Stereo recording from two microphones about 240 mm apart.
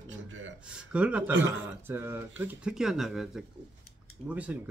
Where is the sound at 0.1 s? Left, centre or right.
Right.